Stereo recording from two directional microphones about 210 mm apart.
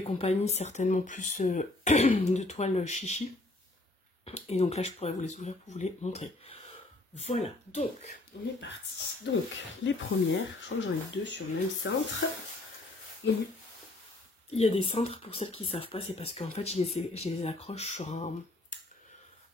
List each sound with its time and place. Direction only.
0.0 s speech: 30° left (ahead or behind)
8.3 s speech: 50° left (ahead or behind)
9.8 s speech: 60° left (ahead or behind)
14.5 s speech: 30° left (ahead or behind)